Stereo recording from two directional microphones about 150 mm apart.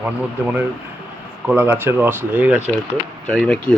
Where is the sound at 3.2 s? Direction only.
5° left (ahead or behind).